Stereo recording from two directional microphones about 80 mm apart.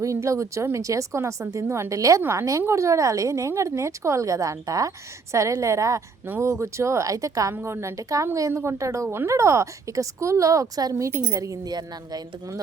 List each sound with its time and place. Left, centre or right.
0.0 s a woman's voice: right
11.7 s speech: right